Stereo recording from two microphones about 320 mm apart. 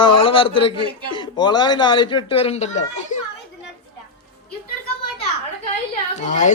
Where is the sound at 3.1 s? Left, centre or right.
Left.